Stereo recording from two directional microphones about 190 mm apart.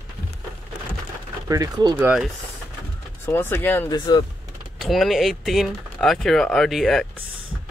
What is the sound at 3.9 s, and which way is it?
Speech, 25° left (ahead or behind).